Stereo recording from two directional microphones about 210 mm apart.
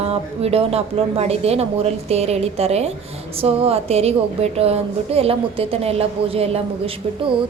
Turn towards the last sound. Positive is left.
turn(degrees=-25)  # may be behind; listen again after turning